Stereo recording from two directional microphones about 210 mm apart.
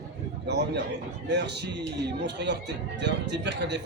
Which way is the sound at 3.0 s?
55° right (ahead or behind).